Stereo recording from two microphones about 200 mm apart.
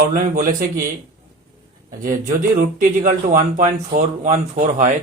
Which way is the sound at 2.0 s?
45° right (ahead or behind).